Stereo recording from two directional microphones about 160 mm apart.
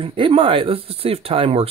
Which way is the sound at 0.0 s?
35° right (ahead or behind).